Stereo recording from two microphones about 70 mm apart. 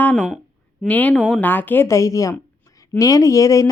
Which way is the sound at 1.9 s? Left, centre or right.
Left.